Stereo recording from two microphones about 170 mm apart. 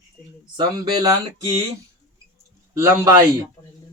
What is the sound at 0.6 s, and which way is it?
Speech, 20° right (ahead or behind).